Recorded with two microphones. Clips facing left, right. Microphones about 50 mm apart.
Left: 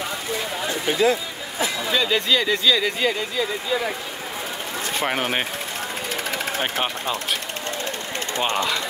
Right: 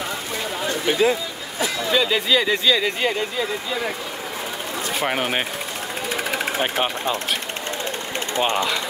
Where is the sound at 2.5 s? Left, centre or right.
Centre.